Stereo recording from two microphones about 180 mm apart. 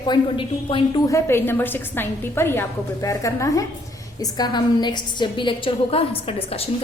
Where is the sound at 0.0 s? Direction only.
25° left (ahead or behind).